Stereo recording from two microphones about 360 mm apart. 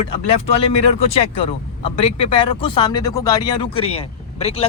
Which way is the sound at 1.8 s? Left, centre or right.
Centre.